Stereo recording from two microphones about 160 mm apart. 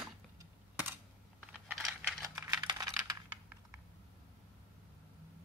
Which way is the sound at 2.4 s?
25° right (ahead or behind).